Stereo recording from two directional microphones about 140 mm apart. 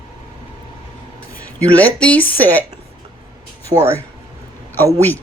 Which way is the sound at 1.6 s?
10° left (ahead or behind).